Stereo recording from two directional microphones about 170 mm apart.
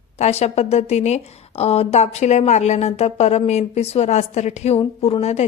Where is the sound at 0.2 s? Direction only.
40° left (ahead or behind).